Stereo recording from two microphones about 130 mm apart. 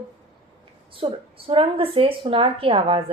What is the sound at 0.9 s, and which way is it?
A woman's voice, 45° right (ahead or behind).